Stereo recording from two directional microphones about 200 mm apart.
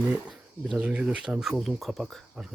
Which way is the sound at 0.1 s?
5° right (ahead or behind).